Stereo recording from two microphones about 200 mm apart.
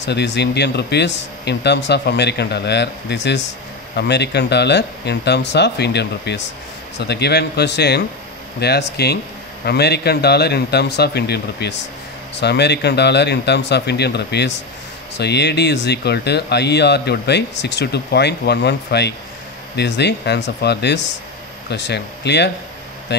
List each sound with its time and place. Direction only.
0.0 s speech: 60° left (ahead or behind)